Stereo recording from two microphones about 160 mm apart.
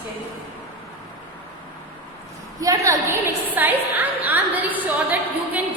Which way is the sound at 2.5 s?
20° right (ahead or behind).